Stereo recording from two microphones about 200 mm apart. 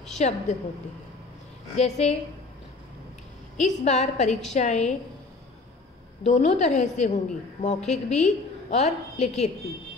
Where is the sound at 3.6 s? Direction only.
35° left (ahead or behind).